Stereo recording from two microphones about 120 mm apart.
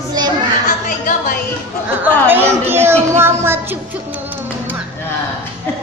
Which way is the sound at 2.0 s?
15° right (ahead or behind).